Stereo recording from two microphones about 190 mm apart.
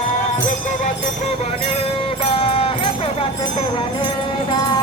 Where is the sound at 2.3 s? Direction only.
30° left (ahead or behind).